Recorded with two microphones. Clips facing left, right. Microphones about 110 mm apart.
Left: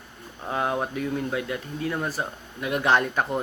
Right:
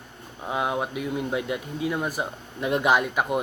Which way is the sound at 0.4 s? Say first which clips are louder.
Even; 10° right (ahead or behind).